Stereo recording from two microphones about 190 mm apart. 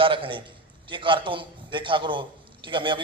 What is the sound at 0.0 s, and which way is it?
A man's voice, 25° right (ahead or behind).